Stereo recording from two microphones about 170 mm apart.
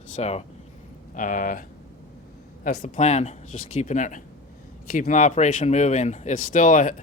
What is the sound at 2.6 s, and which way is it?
Speech, 50° left (ahead or behind).